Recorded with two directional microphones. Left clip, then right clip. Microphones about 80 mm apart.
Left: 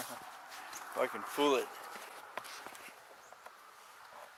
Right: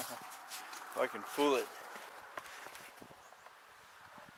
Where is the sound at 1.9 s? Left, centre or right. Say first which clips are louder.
Left 2 dB; left.